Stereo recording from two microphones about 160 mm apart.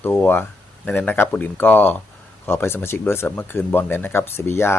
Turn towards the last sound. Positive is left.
turn(degrees=15)  # may be behind; listen again after turning